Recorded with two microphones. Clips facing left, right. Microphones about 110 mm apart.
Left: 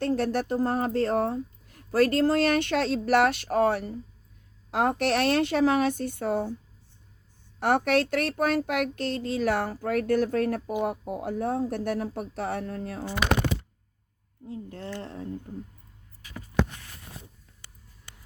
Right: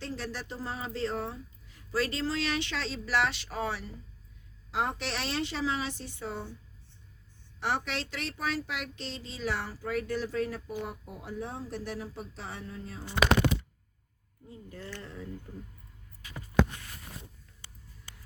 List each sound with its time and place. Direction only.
0.0 s speech: 55° left (ahead or behind)
7.6 s speech: 55° left (ahead or behind)
14.4 s speech: 65° left (ahead or behind)
15.5 s speech: 25° left (ahead or behind)